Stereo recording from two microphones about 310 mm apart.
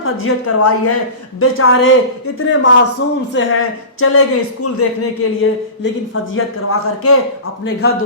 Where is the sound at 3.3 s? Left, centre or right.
Left.